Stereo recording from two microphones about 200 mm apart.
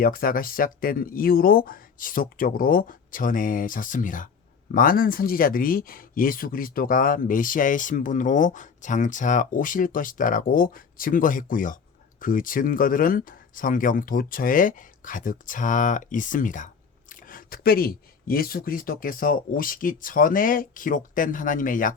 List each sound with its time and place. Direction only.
0.0 s speech: 45° left (ahead or behind)